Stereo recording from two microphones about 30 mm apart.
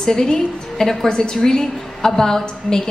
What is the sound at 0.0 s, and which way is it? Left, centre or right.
A woman's voice, centre.